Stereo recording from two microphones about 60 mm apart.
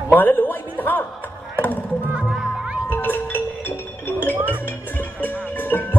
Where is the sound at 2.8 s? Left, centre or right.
Left.